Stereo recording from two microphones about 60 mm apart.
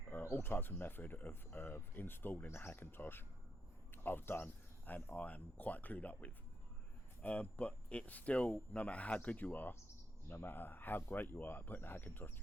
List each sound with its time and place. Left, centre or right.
0.3 s speech: left